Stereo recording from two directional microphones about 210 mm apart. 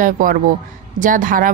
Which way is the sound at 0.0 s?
40° right (ahead or behind).